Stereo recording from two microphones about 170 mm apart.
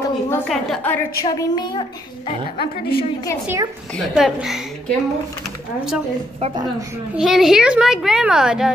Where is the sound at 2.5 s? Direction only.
60° left (ahead or behind).